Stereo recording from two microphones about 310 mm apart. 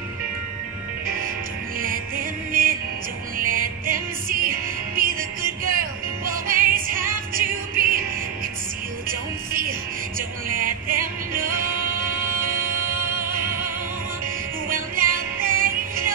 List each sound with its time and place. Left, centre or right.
1.8 s music: right
9.5 s music: right
14.7 s music: right